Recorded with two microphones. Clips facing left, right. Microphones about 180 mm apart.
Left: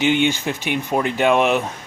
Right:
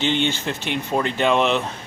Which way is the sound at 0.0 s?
10° left (ahead or behind).